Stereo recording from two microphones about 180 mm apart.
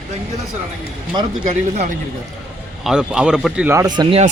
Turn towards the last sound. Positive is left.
turn(degrees=-30)  # may be behind; listen again after turning